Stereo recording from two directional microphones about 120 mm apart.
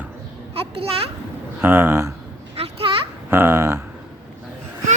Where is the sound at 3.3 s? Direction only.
20° right (ahead or behind).